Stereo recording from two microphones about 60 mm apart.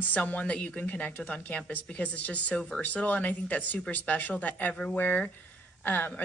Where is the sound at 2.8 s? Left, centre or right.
Left.